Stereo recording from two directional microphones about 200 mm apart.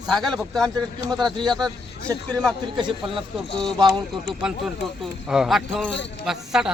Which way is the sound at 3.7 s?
20° right (ahead or behind).